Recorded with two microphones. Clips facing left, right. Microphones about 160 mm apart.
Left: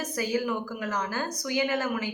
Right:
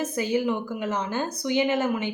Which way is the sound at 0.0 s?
25° right (ahead or behind).